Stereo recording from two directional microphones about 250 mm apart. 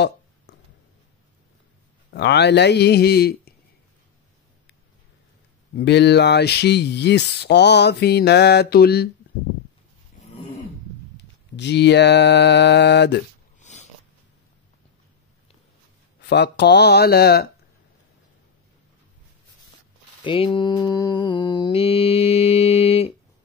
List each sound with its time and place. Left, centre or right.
0.5 s a sound: left
2.1 s speech: left
5.8 s speech: left
11.5 s a sound: left
13.6 s dog: left
16.2 s speech: left
20.2 s mantra: left